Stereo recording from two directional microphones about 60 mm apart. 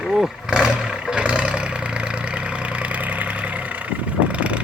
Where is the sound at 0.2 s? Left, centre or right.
Centre.